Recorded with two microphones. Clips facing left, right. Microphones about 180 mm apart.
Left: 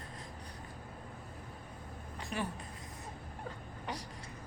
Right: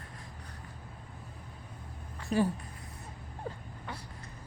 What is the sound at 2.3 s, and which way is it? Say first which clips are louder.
Speech: right 10 dB; 35° right (ahead or behind).